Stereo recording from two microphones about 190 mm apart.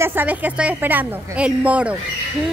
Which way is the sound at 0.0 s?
10° right (ahead or behind).